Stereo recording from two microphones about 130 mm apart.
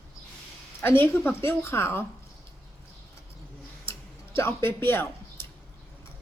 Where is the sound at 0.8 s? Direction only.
15° left (ahead or behind).